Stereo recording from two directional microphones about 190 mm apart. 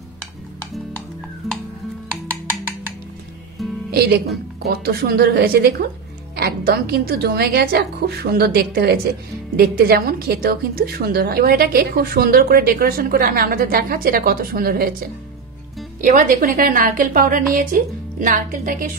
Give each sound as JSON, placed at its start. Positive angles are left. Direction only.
{"t": 1.4, "sound": "music", "side_deg": 0}
{"t": 4.6, "sound": "a woman's voice", "side_deg": -55}
{"t": 16.0, "sound": "a woman's voice", "side_deg": -45}